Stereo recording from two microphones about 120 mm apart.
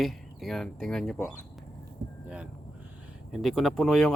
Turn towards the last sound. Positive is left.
turn(degrees=5)  # may be behind; listen again after turning